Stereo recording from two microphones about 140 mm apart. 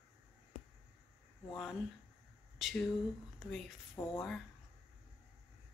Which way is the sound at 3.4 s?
Centre (ahead or behind).